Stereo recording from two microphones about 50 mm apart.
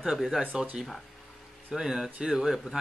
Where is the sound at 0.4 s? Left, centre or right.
Right.